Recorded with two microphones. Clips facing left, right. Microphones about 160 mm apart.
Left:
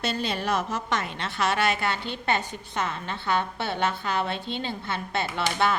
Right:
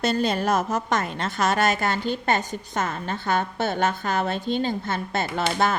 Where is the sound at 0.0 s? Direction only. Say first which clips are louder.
Right 6 dB; 45° right (ahead or behind).